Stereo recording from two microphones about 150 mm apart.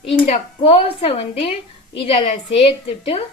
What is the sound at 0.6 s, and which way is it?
A woman's voice, 40° left (ahead or behind).